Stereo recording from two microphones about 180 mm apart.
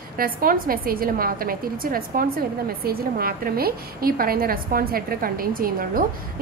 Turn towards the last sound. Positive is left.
turn(degrees=-50)  # may be behind; listen again after turning